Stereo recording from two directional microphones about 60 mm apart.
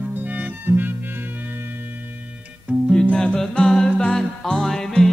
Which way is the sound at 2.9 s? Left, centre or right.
Centre.